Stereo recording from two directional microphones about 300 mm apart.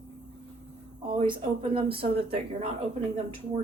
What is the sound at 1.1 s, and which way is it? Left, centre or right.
Speech, centre.